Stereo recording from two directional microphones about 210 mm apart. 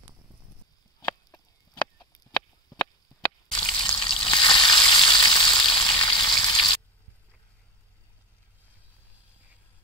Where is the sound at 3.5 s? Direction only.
20° left (ahead or behind).